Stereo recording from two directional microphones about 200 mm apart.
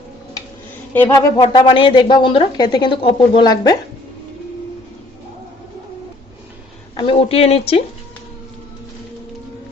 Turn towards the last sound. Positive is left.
turn(degrees=30)  # may be behind; listen again after turning